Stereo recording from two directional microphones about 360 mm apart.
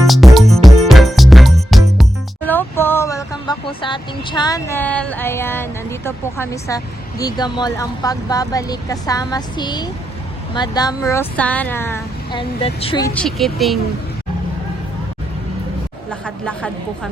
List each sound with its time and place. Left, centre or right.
0.0 s music: centre
10.5 s speech: centre
16.2 s a woman's voice: centre